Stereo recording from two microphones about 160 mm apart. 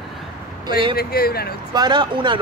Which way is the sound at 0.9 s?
70° left (ahead or behind).